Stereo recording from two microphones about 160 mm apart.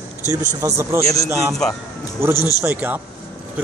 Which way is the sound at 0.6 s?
20° right (ahead or behind).